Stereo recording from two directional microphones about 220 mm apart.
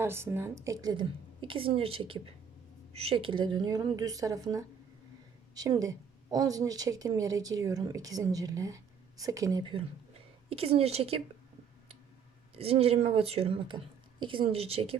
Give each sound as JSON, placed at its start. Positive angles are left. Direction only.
{"t": 0.0, "sound": "a woman's voice", "side_deg": -10}
{"t": 12.5, "sound": "a woman's voice", "side_deg": -25}